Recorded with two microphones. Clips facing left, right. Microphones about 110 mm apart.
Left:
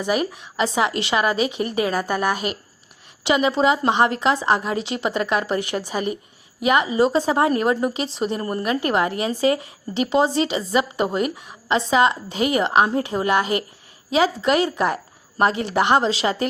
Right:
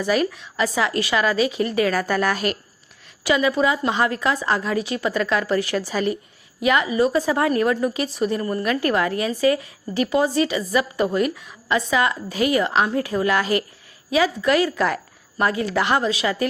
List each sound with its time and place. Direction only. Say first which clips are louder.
0.0 s a woman's voice: right 1 dB; 20° left (ahead or behind)